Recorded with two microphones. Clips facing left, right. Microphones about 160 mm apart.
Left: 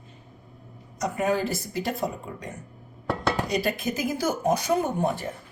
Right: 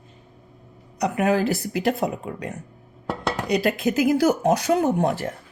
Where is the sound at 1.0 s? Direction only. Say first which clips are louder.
Right 4 dB; 75° right (ahead or behind).